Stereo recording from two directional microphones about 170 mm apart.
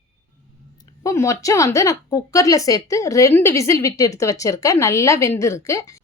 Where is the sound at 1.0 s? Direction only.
20° left (ahead or behind).